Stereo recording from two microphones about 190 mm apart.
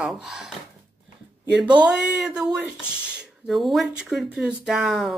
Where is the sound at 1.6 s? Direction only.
5° right (ahead or behind).